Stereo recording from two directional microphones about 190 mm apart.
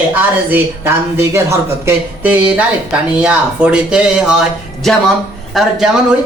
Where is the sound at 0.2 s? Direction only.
10° right (ahead or behind).